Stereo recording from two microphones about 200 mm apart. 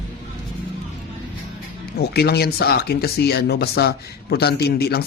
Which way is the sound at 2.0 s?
55° left (ahead or behind).